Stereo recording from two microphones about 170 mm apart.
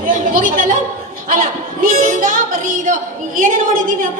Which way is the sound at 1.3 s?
50° right (ahead or behind).